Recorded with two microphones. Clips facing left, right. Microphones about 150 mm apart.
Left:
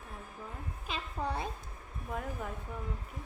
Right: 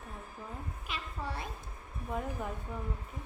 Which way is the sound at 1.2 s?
40° left (ahead or behind).